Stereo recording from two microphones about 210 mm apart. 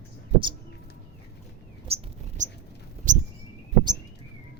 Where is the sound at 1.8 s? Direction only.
30° right (ahead or behind).